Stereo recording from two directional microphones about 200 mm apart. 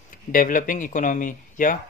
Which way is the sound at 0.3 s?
45° left (ahead or behind).